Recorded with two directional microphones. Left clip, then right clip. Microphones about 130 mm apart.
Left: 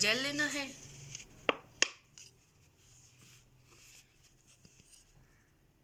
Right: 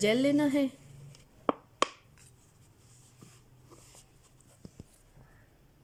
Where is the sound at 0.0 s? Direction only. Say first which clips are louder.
Right 5 dB; 60° right (ahead or behind).